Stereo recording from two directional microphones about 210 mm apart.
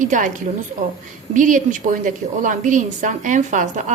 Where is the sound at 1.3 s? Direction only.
35° right (ahead or behind).